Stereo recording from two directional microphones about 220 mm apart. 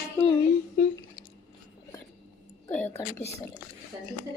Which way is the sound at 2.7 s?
10° left (ahead or behind).